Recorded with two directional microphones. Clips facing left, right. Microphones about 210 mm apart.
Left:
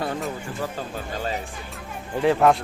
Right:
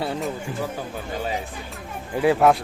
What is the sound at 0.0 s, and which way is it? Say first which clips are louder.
Speech: right 1 dB; 5° right (ahead or behind).